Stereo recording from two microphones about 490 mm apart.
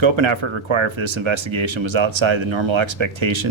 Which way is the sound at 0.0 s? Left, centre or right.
Right.